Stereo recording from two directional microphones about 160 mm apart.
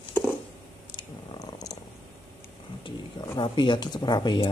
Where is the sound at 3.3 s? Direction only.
30° left (ahead or behind).